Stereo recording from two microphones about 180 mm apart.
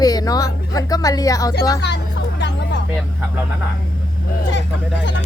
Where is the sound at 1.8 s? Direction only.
70° left (ahead or behind).